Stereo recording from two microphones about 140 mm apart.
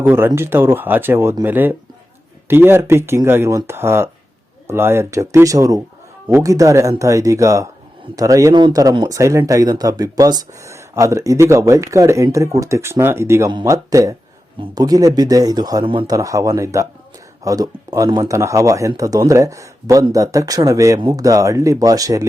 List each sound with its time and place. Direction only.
0.0 s speech: 15° right (ahead or behind); by 16.1 s 35° right (ahead or behind)
16.1 s speech: 25° right (ahead or behind)